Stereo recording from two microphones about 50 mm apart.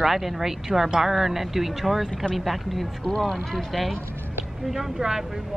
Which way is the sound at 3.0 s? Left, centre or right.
Centre.